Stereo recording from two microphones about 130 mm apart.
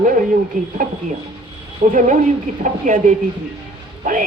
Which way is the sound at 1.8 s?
90° right.